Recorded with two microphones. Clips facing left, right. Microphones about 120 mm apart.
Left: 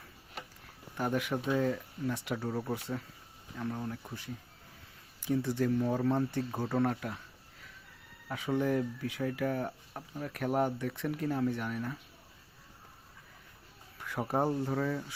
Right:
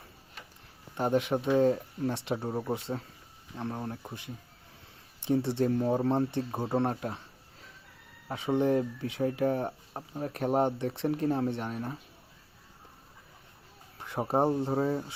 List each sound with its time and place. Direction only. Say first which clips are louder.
0.9 s speech: right 5 dB; 25° right (ahead or behind)
5.2 s speech: right 3 dB; 30° right (ahead or behind)
8.3 s speech: right 4 dB; 25° right (ahead or behind)
14.0 s speech: right 4 dB; 25° right (ahead or behind)